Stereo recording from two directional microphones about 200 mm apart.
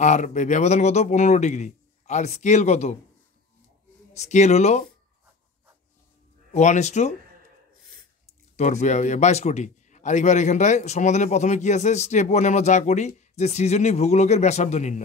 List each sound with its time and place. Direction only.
0.0 s a man's voice: 35° left (ahead or behind)
4.1 s a man's voice: 35° left (ahead or behind)
6.5 s a man's voice: 35° left (ahead or behind)
8.3 s a man's voice: 35° left (ahead or behind)